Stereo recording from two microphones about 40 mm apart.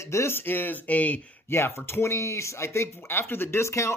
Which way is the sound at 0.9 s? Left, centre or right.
Left.